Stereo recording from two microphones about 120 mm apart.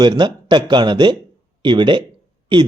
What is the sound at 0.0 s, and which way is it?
Speech, 35° right (ahead or behind).